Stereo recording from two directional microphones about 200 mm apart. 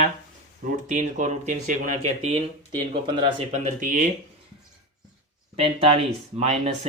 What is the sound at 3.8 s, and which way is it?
Speech, 40° right (ahead or behind).